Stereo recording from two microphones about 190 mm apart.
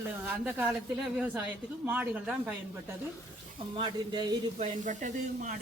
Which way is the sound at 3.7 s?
25° right (ahead or behind).